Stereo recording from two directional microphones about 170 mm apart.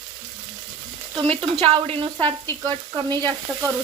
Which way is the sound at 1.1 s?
30° right (ahead or behind).